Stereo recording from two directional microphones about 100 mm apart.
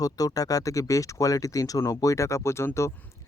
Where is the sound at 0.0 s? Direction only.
35° left (ahead or behind).